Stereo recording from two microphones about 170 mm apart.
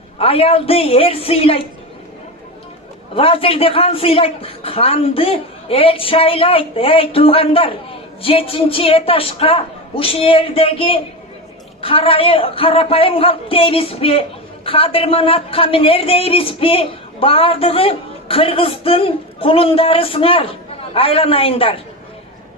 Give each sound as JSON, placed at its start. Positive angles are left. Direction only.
{"t": 0.2, "sound": "a man's voice", "side_deg": 35}
{"t": 3.2, "sound": "a man's voice", "side_deg": 35}